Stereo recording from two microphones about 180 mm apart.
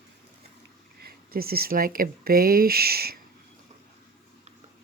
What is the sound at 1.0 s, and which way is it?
Speech, 55° right (ahead or behind).